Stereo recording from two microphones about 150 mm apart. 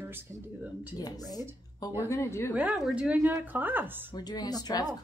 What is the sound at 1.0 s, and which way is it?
A woman's voice, 25° left (ahead or behind).